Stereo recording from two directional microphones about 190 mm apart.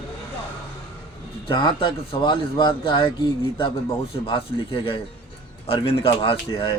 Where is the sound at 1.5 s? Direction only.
25° left (ahead or behind).